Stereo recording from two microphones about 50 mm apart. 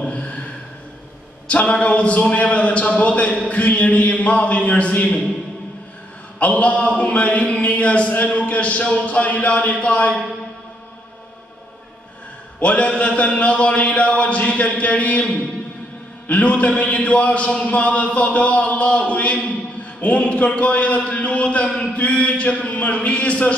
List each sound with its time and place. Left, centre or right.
0.0 s a sound: left
1.5 s a man's voice: left
6.4 s a man's voice: left
12.5 s a man's voice: left